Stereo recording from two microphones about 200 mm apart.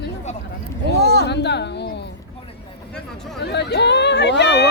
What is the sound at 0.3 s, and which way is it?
Speech, 35° left (ahead or behind).